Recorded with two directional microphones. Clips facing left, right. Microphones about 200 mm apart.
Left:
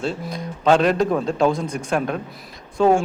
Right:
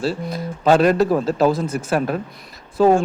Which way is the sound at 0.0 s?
5° right (ahead or behind).